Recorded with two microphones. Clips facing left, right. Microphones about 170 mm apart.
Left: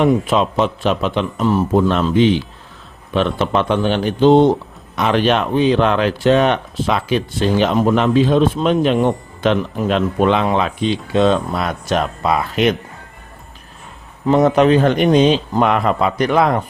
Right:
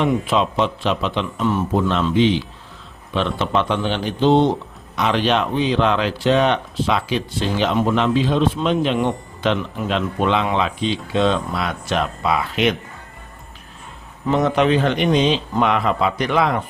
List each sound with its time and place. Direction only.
0.0 s speech: 45° left (ahead or behind)
14.3 s speech: 40° left (ahead or behind)